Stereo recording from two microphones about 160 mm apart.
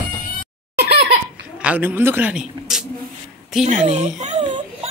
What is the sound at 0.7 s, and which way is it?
Laughter, 90° right.